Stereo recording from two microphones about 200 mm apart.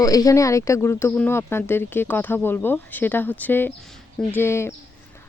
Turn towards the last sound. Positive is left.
turn(degrees=10)  # may be behind; listen again after turning